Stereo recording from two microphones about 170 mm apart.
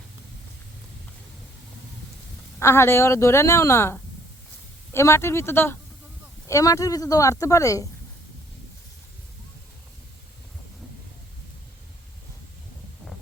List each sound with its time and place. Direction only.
2.6 s a woman's voice: 15° left (ahead or behind)